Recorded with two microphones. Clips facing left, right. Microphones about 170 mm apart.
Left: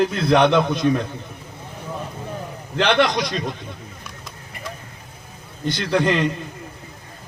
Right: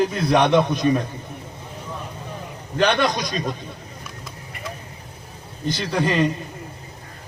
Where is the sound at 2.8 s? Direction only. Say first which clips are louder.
Left 1 dB; 80° left.